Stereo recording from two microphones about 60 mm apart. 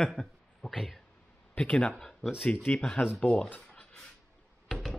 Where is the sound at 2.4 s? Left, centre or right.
Left.